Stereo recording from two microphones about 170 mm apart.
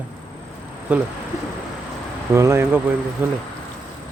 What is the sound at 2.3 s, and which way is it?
Speech, 15° right (ahead or behind).